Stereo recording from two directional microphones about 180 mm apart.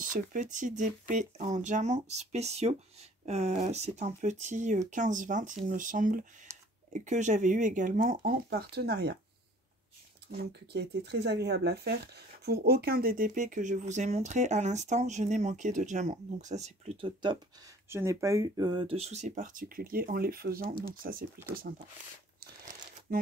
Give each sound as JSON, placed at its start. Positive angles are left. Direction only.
{"t": 0.0, "sound": "speech", "side_deg": -50}
{"t": 10.3, "sound": "speech", "side_deg": -65}
{"t": 17.0, "sound": "speech", "side_deg": -25}
{"t": 17.8, "sound": "speech", "side_deg": -15}